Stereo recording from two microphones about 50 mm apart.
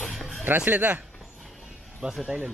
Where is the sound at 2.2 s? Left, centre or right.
Right.